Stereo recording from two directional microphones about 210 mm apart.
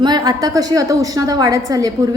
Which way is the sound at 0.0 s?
20° right (ahead or behind).